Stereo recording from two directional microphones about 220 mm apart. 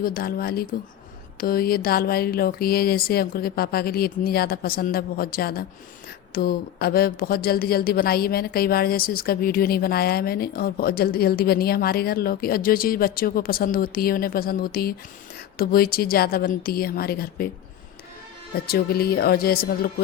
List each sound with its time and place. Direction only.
0.0 s a woman's voice: 45° left (ahead or behind)
18.5 s a woman's voice: 45° left (ahead or behind)